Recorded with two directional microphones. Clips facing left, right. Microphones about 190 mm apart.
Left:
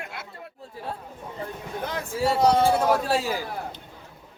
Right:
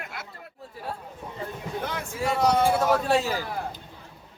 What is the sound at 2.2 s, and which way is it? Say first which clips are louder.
Speech: left 3 dB; 30° left (ahead or behind).